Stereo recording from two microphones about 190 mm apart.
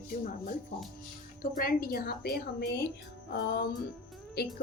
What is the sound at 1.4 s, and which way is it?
A woman's voice, 50° left (ahead or behind).